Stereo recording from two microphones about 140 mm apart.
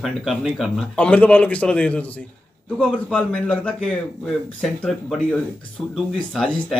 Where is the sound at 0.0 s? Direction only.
Centre (ahead or behind).